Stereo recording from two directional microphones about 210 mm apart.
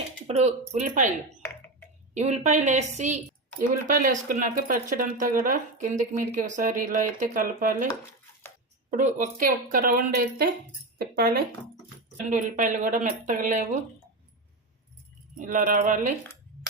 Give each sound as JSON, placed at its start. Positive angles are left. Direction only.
{"t": 0.3, "sound": "speech", "side_deg": -30}
{"t": 2.1, "sound": "speech", "side_deg": -35}
{"t": 8.9, "sound": "speech", "side_deg": -40}
{"t": 15.4, "sound": "speech", "side_deg": -40}